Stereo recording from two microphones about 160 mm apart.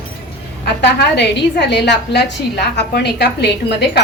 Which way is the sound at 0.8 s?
90° left.